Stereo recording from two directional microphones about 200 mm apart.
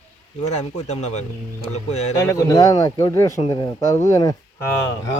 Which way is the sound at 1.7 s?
90° left.